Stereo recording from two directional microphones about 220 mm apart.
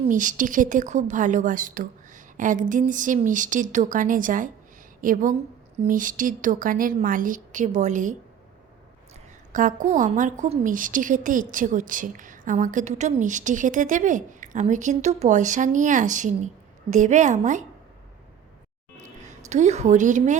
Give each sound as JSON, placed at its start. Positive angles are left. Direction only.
{"t": 0.0, "sound": "a woman's voice", "side_deg": -35}
{"t": 9.5, "sound": "a woman's voice", "side_deg": -35}
{"t": 18.9, "sound": "a woman's voice", "side_deg": -35}